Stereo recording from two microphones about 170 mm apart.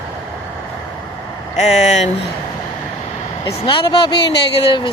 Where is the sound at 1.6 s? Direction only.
40° left (ahead or behind).